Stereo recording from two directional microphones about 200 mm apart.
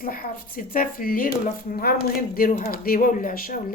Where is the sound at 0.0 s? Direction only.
45° left (ahead or behind).